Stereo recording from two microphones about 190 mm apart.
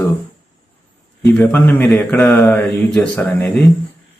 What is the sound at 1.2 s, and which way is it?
Speech, 10° left (ahead or behind).